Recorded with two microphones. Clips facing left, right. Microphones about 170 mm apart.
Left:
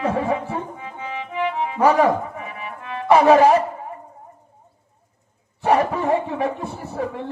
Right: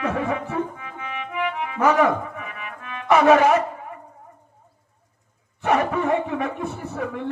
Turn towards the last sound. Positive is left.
turn(degrees=35)  # may be behind; listen again after turning